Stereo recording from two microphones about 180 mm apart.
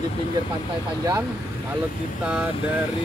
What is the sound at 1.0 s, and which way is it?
Speech, 20° right (ahead or behind).